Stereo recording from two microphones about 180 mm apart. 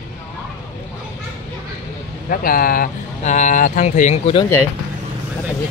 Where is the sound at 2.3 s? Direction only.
50° left (ahead or behind); by 4.5 s 30° left (ahead or behind).